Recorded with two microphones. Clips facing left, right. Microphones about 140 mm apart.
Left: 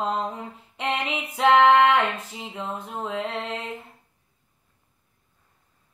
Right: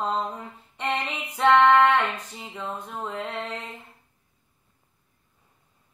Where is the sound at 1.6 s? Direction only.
20° left (ahead or behind).